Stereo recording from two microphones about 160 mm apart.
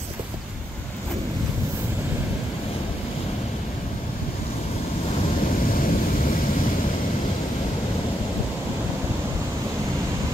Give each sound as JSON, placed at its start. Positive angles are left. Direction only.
{"t": 5.7, "sound": "vehicle", "side_deg": 60}